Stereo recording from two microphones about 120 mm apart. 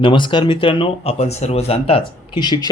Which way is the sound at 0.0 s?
45° left (ahead or behind).